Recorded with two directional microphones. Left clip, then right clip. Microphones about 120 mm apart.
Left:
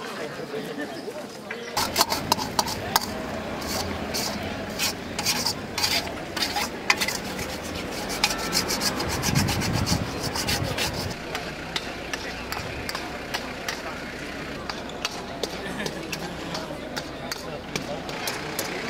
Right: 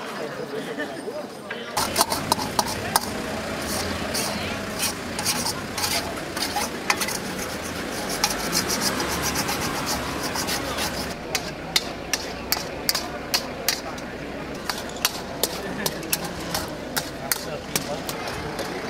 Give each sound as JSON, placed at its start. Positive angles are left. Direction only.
{"t": 1.8, "sound": "horse", "side_deg": 0}
{"t": 3.7, "sound": "vehicle", "side_deg": 0}
{"t": 4.7, "sound": "stir", "side_deg": 0}
{"t": 8.2, "sound": "rub", "side_deg": 0}
{"t": 11.3, "sound": "stir", "side_deg": -40}
{"t": 14.7, "sound": "a sound", "side_deg": -45}